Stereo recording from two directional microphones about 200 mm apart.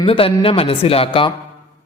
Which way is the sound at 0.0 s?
25° left (ahead or behind).